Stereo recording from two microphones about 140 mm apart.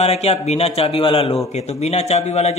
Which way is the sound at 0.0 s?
50° left (ahead or behind).